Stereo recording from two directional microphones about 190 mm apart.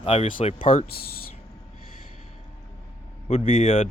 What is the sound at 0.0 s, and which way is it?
Speech, 30° left (ahead or behind).